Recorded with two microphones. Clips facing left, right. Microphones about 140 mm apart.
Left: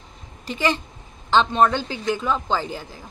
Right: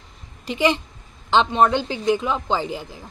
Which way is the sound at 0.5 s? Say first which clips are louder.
Right 3 dB; 20° right (ahead or behind).